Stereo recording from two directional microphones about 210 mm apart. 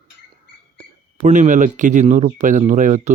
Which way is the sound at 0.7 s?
35° right (ahead or behind).